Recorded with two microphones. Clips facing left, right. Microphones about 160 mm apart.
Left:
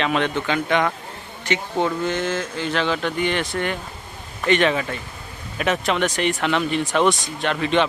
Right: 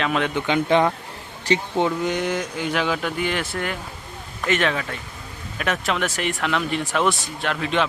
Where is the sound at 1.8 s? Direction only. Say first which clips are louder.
Even; 15° right (ahead or behind).